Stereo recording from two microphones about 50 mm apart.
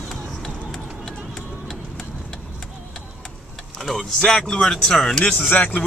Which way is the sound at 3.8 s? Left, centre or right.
Centre.